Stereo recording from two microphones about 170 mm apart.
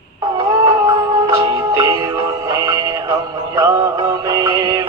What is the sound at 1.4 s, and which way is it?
Music, 25° right (ahead or behind).